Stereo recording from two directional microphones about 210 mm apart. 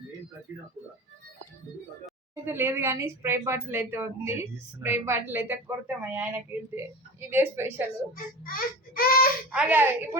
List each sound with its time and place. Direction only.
2.3 s speech: 10° right (ahead or behind)
8.1 s speech: 40° left (ahead or behind)
9.5 s speech: 5° right (ahead or behind)